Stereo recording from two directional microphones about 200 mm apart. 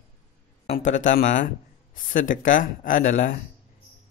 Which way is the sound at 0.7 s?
40° left (ahead or behind).